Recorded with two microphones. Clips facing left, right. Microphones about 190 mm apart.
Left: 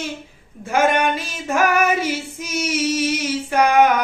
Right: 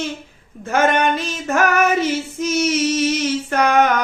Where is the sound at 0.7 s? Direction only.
10° left (ahead or behind).